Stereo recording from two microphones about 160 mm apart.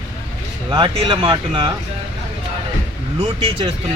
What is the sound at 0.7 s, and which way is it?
Speech, 30° right (ahead or behind).